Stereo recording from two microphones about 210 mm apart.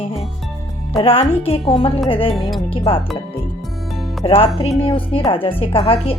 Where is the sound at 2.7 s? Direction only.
25° left (ahead or behind).